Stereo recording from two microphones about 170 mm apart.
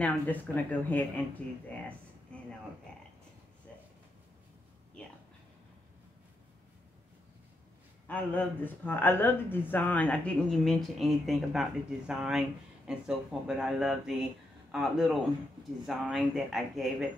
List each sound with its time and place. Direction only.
0.0 s speech: 10° left (ahead or behind)
1.7 s a sound: 10° left (ahead or behind)
8.1 s speech: 10° left (ahead or behind)